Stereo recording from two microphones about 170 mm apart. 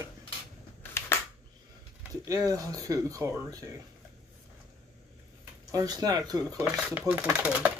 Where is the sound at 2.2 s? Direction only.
20° right (ahead or behind).